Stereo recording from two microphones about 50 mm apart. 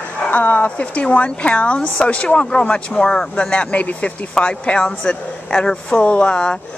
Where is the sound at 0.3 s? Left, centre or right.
Left.